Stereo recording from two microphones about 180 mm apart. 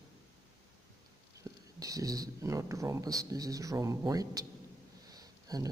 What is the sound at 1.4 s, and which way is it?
A man's voice, 20° right (ahead or behind).